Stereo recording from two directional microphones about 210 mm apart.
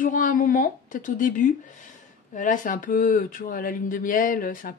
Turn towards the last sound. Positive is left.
turn(degrees=40)  # may be behind; listen again after turning